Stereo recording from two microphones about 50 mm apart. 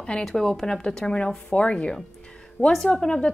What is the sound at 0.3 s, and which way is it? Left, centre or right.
A woman's voice, centre.